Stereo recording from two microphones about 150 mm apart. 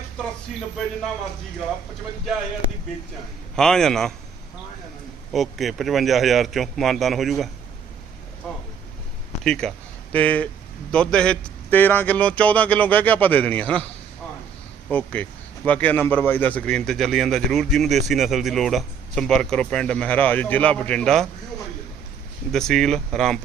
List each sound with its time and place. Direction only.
3.5 s speech: 5° left (ahead or behind)
5.3 s speech: centre (ahead or behind)
9.4 s a man's voice: 5° left (ahead or behind)
14.8 s speech: 10° left (ahead or behind)
22.5 s speech: 5° left (ahead or behind)